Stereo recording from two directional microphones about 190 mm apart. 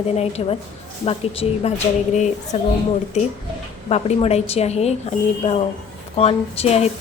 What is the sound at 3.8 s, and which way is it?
A woman's voice, 35° left (ahead or behind).